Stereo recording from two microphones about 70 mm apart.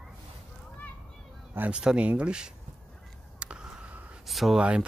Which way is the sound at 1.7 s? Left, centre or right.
Centre.